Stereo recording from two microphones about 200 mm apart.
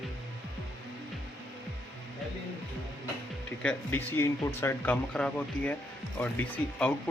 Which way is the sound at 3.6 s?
10° left (ahead or behind).